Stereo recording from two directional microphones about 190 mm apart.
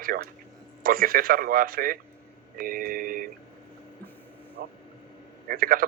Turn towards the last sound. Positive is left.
turn(degrees=-50)  # may be behind; listen again after turning